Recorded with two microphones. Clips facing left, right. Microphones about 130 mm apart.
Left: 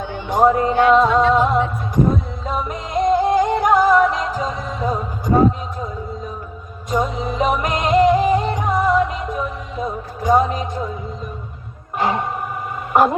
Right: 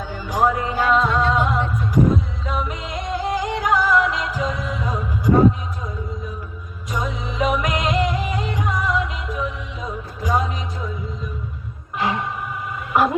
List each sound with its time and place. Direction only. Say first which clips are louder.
0.1 s music: left 6 dB; 55° left (ahead or behind)
0.4 s music: left 5 dB; 40° left (ahead or behind)
0.7 s music: left 5 dB; centre (ahead or behind)
1.3 s music: left 4 dB; 30° left (ahead or behind)
1.5 s music: left 4 dB; centre (ahead or behind)
2.6 s music: left 9 dB; 45° left (ahead or behind)
6.9 s music: left 6 dB; 45° left (ahead or behind)
11.9 s music: left 3 dB; 45° left (ahead or behind)